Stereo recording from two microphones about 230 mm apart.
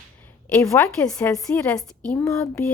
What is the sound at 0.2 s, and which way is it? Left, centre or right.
A woman's voice, centre.